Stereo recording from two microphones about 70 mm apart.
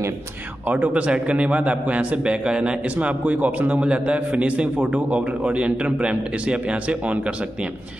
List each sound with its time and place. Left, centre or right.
0.7 s a man's voice: centre